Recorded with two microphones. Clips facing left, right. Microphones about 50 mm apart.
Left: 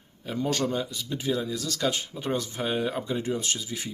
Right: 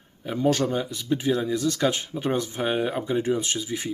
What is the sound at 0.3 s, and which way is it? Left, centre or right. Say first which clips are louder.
Speech: right 4 dB; centre.